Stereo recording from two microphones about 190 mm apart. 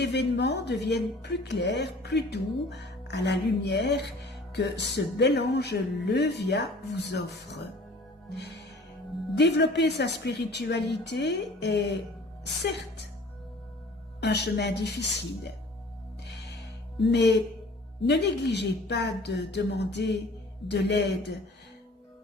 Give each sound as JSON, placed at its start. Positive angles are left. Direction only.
{"t": 0.0, "sound": "a woman's voice", "side_deg": 60}
{"t": 14.2, "sound": "a woman's voice", "side_deg": 60}
{"t": 17.0, "sound": "a woman's voice", "side_deg": 65}